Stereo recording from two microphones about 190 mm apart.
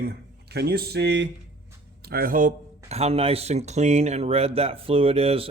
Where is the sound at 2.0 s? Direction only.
55° right (ahead or behind).